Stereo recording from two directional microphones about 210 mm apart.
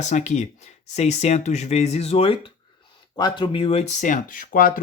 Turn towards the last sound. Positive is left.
turn(degrees=40)  # may be behind; listen again after turning